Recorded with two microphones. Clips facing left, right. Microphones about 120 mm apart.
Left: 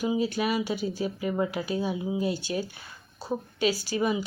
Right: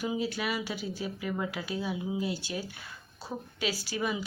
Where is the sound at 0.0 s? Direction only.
25° left (ahead or behind).